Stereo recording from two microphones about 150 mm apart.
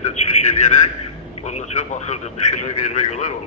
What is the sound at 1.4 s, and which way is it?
Speech, 50° left (ahead or behind).